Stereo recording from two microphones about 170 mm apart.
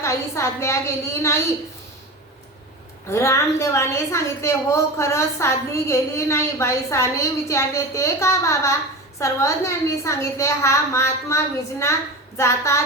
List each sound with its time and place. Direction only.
0.0 s a woman's voice: 15° left (ahead or behind)
3.1 s a woman's voice: 15° left (ahead or behind)